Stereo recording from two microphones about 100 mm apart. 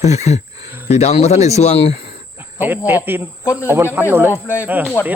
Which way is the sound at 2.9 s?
20° right (ahead or behind).